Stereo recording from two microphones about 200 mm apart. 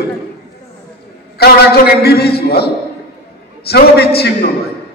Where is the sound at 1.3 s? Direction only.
50° left (ahead or behind).